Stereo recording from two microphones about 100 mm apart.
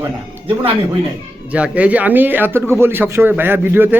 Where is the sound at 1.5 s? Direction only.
15° right (ahead or behind).